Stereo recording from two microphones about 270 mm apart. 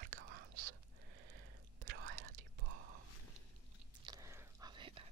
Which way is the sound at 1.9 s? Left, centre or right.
Right.